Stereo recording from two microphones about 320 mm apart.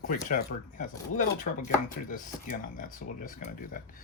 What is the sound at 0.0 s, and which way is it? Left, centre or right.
Speech, left.